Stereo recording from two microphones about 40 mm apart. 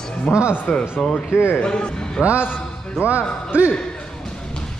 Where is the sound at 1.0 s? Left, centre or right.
Centre.